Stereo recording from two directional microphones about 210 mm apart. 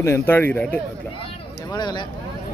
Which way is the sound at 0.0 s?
10° left (ahead or behind).